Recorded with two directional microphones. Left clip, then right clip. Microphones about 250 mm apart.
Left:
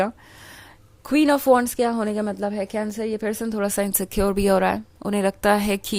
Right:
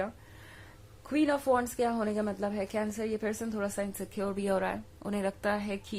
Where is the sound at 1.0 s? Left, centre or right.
Left.